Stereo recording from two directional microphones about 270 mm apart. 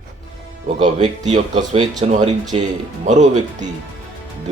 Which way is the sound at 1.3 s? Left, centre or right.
Right.